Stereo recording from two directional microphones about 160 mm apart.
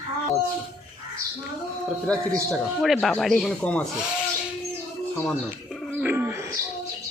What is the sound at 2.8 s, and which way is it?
Speech, centre (ahead or behind).